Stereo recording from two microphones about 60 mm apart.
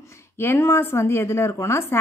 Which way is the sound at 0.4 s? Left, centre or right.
Left.